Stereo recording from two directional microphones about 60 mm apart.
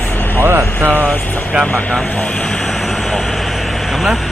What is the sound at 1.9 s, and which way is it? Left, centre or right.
Vehicle, centre.